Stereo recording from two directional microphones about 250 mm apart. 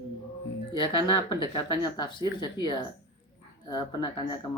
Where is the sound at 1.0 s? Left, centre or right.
Centre.